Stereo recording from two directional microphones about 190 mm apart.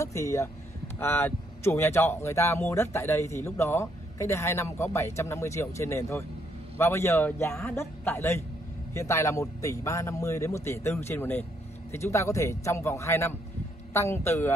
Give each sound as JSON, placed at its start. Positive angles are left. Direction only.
{"t": 0.0, "sound": "speech", "side_deg": 15}